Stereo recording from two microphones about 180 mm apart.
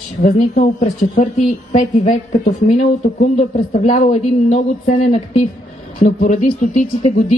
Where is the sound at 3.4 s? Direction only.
40° left (ahead or behind).